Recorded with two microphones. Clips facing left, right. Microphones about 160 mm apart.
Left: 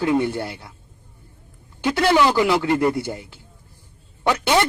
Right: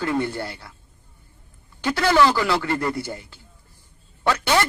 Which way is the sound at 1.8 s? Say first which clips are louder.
Left 1 dB; 20° left (ahead or behind).